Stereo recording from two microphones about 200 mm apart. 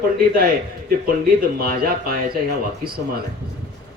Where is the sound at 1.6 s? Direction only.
50° right (ahead or behind).